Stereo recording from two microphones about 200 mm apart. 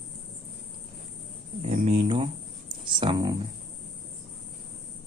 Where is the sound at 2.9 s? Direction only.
20° right (ahead or behind).